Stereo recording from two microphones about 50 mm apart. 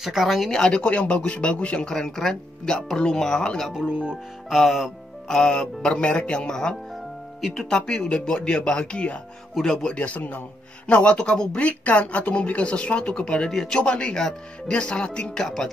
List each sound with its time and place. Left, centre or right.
0.0 s speech: centre
0.5 s speech: centre
1.9 s speech: centre
3.7 s speech: right
4.5 s speech: centre
5.4 s speech: centre
7.8 s speech: centre
9.6 s speech: centre
9.8 s speech: left
10.9 s speech: left